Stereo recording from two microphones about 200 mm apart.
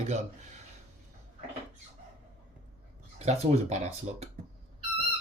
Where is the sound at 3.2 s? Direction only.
35° right (ahead or behind).